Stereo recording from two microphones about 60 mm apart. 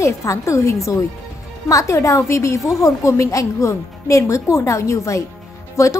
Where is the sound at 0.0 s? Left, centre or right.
Left.